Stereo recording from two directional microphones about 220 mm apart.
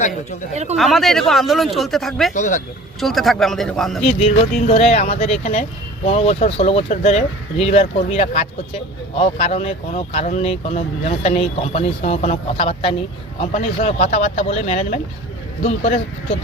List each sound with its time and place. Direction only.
0.5 s speech: 30° right (ahead or behind)
0.8 s speech: centre (ahead or behind)
2.3 s speech: 35° left (ahead or behind)
3.0 s speech: centre (ahead or behind)
4.0 s speech: 30° left (ahead or behind)